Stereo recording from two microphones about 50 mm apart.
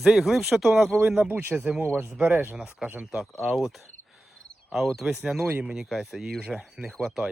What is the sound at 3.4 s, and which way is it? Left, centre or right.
Speech, centre.